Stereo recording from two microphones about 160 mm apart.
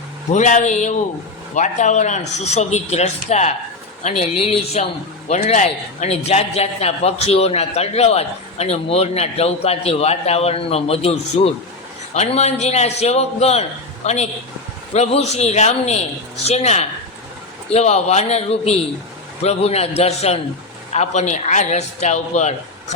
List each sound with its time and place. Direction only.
0.3 s a man's voice: 50° left (ahead or behind)